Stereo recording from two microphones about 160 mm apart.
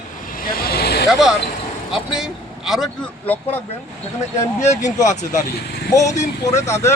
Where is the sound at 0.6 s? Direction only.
80° left.